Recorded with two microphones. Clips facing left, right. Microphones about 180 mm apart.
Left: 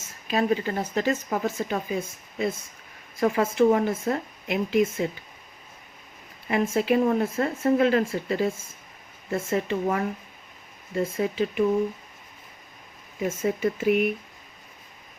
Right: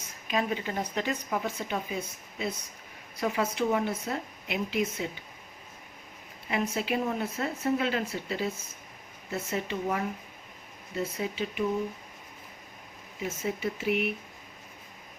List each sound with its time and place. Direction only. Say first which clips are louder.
0.3 s speech: left 6 dB; 40° left (ahead or behind)
6.5 s speech: left 7 dB; 45° left (ahead or behind)
13.2 s speech: left 7 dB; 50° left (ahead or behind)